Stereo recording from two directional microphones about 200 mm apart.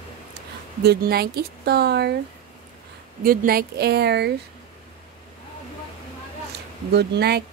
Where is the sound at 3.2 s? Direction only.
45° right (ahead or behind).